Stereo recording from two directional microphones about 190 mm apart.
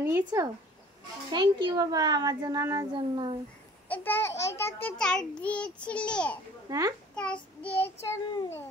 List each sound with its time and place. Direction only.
0.0 s speech: 15° right (ahead or behind)
1.3 s a child's voice: 25° right (ahead or behind)
3.9 s a child's voice: 10° left (ahead or behind)
6.7 s a child's voice: 20° right (ahead or behind)
7.2 s a child's voice: 5° left (ahead or behind)